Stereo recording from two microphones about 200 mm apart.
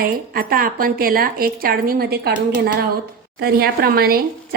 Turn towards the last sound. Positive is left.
turn(degrees=-50)  # may be behind; listen again after turning